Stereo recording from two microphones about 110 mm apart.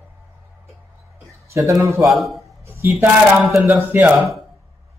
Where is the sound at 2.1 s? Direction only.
Centre (ahead or behind).